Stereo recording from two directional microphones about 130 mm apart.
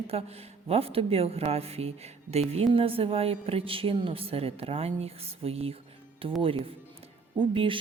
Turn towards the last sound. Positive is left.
turn(degrees=-40)  # may be behind; listen again after turning